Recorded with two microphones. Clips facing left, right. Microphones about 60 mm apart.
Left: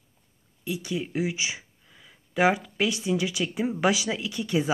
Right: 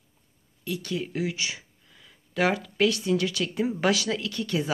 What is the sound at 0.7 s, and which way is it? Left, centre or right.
Speech, centre.